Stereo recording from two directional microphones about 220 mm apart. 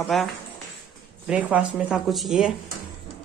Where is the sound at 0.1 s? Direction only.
Centre (ahead or behind).